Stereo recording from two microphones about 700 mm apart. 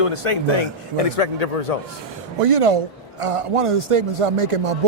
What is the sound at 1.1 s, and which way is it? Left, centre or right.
Speech, left.